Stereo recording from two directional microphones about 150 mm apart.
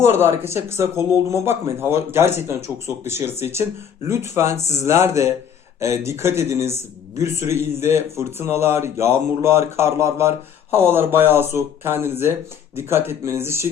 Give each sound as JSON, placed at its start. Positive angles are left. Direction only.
{"t": 0.0, "sound": "speech", "side_deg": -15}
{"t": 4.5, "sound": "speech", "side_deg": 50}
{"t": 4.8, "sound": "speech", "side_deg": -20}